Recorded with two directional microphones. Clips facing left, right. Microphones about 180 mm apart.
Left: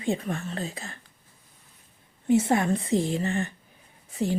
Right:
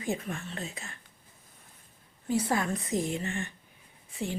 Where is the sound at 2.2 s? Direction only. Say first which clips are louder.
Left 7 dB; 25° left (ahead or behind).